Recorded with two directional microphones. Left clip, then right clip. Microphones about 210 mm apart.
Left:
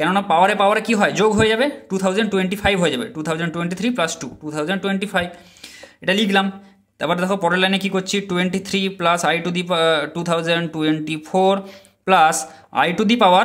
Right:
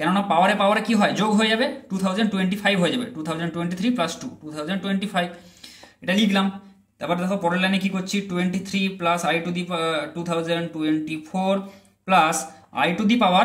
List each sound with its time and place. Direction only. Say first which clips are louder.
0.0 s speech: left 4 dB; 35° left (ahead or behind)